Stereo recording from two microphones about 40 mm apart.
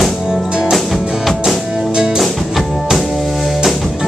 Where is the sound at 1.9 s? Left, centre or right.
Centre.